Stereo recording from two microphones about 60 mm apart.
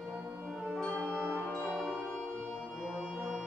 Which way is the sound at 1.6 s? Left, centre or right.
Centre.